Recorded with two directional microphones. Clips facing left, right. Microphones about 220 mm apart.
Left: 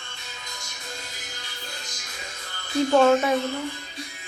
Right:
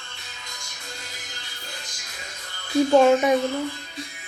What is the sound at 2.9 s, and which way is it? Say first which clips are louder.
Speech: right 2 dB; 15° right (ahead or behind).